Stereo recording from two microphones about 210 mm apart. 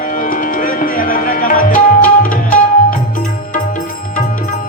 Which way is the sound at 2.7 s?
40° left (ahead or behind).